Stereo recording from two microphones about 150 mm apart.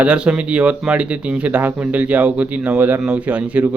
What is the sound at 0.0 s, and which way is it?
Speech, 5° right (ahead or behind).